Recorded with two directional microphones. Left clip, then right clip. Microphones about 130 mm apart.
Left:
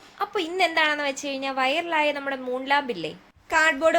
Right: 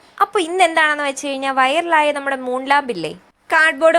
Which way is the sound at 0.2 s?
45° right (ahead or behind).